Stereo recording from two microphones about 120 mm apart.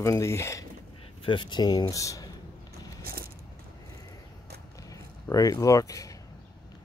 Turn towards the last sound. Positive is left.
turn(degrees=30)  # may be behind; listen again after turning